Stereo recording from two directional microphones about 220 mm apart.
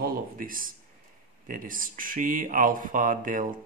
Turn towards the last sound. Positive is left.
turn(degrees=-35)  # may be behind; listen again after turning